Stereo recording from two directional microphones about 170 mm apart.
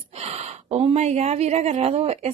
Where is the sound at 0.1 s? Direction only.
40° right (ahead or behind).